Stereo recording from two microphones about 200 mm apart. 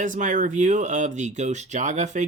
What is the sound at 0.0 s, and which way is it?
Speech, 40° right (ahead or behind).